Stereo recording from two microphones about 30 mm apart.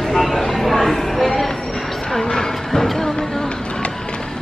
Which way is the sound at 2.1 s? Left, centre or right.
Left.